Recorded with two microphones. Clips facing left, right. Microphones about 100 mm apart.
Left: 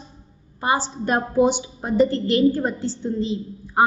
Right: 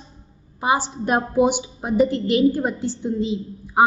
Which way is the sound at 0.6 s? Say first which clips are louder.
Right 1 dB; 15° right (ahead or behind).